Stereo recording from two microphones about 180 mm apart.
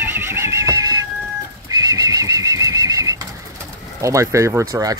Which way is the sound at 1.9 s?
20° right (ahead or behind).